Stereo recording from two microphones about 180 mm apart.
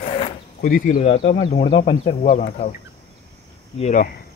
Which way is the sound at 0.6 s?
50° left (ahead or behind).